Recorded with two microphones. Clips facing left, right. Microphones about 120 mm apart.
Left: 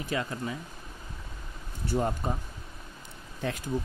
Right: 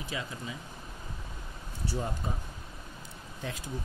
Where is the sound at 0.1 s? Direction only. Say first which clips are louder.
Left 7 dB; 55° left (ahead or behind).